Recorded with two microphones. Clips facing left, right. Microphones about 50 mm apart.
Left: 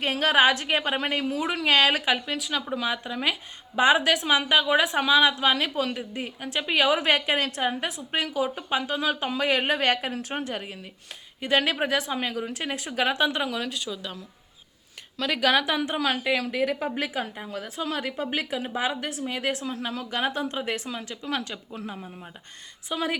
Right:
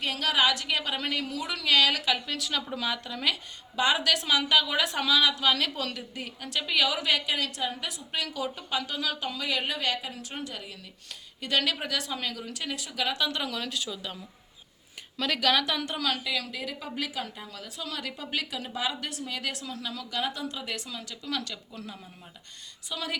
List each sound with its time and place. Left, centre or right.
0.0 s a woman's voice: left
2.2 s a woman's voice: centre; by 10.8 s left
11.3 s a woman's voice: left
13.1 s speech: left; by 14.2 s centre
15.2 s a woman's voice: centre
16.2 s a woman's voice: left
16.9 s a woman's voice: left